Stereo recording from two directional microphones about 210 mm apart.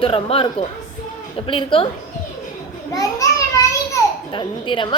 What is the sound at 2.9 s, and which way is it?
A child's voice, 15° left (ahead or behind).